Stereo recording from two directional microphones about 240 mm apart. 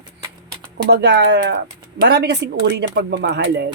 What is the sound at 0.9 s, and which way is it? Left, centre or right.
Speech, right.